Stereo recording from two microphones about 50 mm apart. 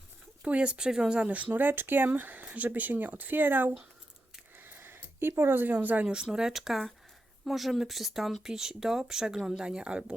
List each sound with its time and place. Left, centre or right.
0.4 s speech: right
1.3 s speech: right
4.5 s a sound: right
5.4 s speech: right
6.3 s speech: centre